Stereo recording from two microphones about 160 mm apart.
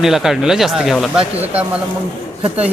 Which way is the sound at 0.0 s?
Centre (ahead or behind).